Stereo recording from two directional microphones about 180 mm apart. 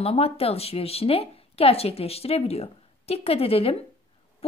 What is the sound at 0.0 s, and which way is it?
A woman's voice, 35° left (ahead or behind).